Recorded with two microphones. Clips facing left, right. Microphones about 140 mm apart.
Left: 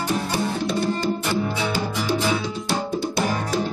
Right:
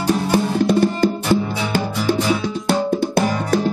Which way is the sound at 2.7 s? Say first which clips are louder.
Right 7 dB; 55° right (ahead or behind).